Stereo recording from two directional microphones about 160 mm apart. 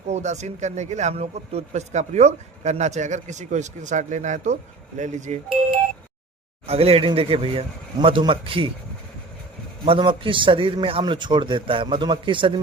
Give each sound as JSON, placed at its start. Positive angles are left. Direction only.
{"t": 0.1, "sound": "a man's voice", "side_deg": -45}
{"t": 6.7, "sound": "a man's voice", "side_deg": -40}
{"t": 9.8, "sound": "a man's voice", "side_deg": -35}